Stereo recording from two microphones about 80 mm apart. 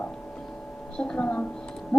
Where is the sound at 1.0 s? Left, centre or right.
Centre.